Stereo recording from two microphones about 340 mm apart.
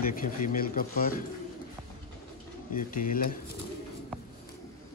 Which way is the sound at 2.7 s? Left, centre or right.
Left.